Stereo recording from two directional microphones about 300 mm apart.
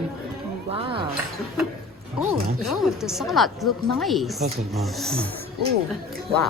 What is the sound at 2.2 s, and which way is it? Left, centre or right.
Speech, centre.